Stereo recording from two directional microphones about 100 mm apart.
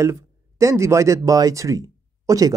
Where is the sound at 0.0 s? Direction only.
30° right (ahead or behind).